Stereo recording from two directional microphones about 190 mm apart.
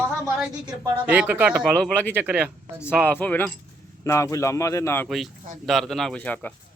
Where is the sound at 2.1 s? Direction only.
10° right (ahead or behind).